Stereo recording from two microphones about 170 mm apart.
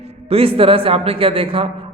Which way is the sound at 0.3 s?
35° right (ahead or behind).